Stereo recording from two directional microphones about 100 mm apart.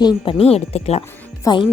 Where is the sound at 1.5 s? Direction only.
40° left (ahead or behind).